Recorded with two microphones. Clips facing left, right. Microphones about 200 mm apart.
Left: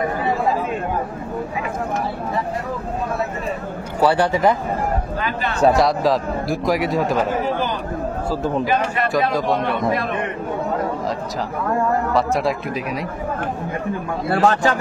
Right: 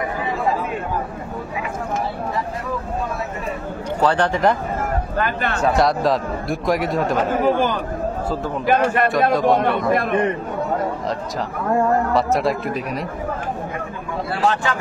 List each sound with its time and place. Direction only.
4.0 s a man's voice: 10° left (ahead or behind)
5.1 s speech: 55° right (ahead or behind)
5.7 s a man's voice: centre (ahead or behind)
7.2 s a man's voice: 50° right (ahead or behind)
9.3 s a man's voice: centre (ahead or behind)
9.8 s a man's voice: 50° right (ahead or behind)
12.1 s a man's voice: centre (ahead or behind)
14.3 s speech: 45° left (ahead or behind)